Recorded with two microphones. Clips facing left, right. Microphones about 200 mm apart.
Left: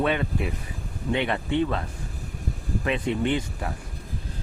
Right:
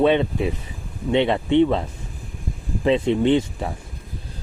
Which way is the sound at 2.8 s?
25° right (ahead or behind).